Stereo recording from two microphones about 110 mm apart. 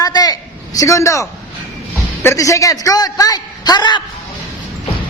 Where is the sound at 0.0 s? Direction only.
35° left (ahead or behind).